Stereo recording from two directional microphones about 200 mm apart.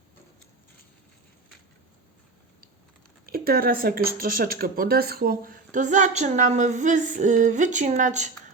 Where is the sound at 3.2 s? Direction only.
50° right (ahead or behind).